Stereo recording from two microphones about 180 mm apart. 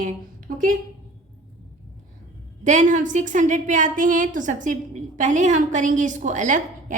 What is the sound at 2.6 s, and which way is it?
A woman's voice, 45° right (ahead or behind).